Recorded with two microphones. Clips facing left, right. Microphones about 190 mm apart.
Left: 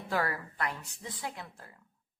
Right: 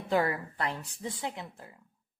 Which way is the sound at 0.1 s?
20° right (ahead or behind).